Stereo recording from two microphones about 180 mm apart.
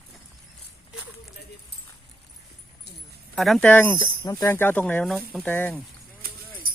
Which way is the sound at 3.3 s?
Centre (ahead or behind).